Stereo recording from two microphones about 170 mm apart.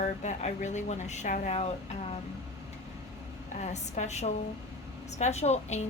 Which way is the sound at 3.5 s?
40° left (ahead or behind).